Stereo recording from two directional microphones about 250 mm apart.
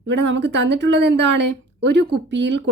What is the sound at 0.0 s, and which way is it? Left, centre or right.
A woman's voice, right.